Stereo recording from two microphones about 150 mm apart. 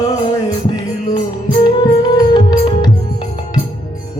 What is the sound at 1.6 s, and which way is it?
Music, 30° left (ahead or behind).